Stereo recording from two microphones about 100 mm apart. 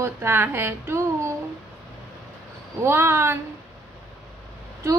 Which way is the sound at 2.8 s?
25° right (ahead or behind).